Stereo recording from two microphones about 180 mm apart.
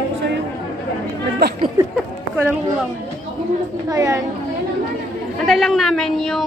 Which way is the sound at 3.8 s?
20° right (ahead or behind).